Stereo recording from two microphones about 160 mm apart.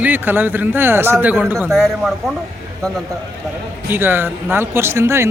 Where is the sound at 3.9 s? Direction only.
15° right (ahead or behind).